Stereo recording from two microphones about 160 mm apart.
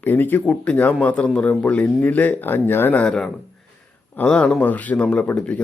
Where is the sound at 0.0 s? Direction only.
10° left (ahead or behind).